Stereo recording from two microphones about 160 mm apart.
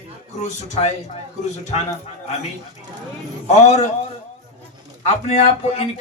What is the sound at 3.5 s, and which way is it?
Speech, 45° left (ahead or behind).